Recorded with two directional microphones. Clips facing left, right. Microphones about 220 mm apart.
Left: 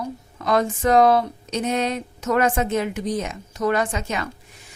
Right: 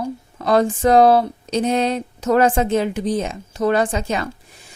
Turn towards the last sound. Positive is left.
turn(degrees=-30)  # may be behind; listen again after turning